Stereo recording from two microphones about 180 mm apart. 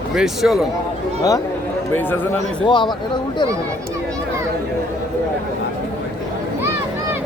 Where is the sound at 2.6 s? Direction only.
25° left (ahead or behind).